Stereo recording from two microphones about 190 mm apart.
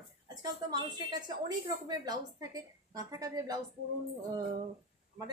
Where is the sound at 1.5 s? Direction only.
20° right (ahead or behind).